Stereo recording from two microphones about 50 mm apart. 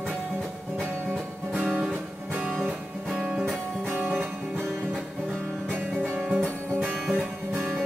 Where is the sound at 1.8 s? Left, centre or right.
Right.